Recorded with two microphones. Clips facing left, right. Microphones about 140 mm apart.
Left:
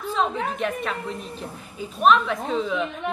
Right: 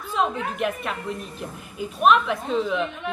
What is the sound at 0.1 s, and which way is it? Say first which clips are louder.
A woman's voice: even; 5° right (ahead or behind).